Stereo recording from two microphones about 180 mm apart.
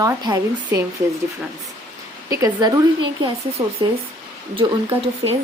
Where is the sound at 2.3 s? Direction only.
20° right (ahead or behind).